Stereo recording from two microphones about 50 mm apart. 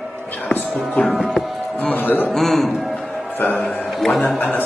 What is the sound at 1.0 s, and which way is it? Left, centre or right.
Music, centre.